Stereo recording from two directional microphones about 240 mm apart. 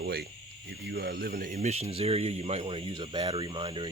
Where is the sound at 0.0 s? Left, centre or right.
Right.